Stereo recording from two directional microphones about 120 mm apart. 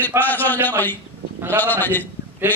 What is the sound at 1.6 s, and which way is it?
Speech, 15° left (ahead or behind).